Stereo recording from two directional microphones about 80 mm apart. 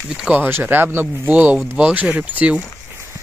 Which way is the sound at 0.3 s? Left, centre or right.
Right.